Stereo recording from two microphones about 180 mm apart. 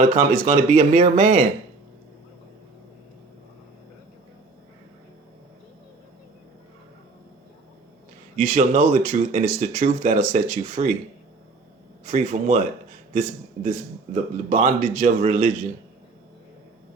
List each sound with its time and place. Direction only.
0.0 s speech: 45° right (ahead or behind)
1.1 s a man's voice: 50° right (ahead or behind)
8.4 s a man's voice: 40° right (ahead or behind)
12.1 s a man's voice: 40° right (ahead or behind)